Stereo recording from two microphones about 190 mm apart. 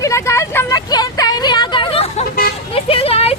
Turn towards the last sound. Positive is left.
turn(degrees=30)  # may be behind; listen again after turning